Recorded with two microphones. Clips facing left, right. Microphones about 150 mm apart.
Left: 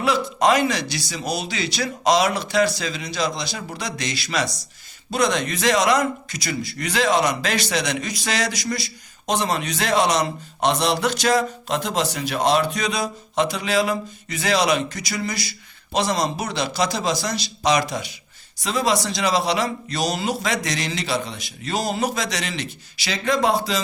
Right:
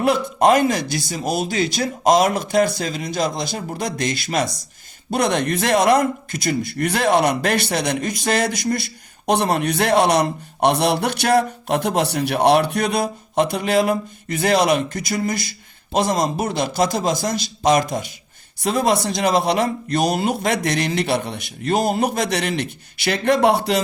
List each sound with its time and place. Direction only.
0.0 s a man's voice: 50° right (ahead or behind)